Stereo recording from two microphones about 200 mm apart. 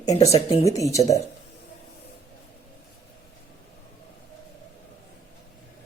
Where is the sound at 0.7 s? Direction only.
15° left (ahead or behind).